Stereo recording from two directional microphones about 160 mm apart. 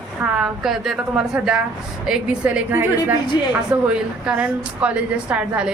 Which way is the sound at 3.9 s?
5° right (ahead or behind).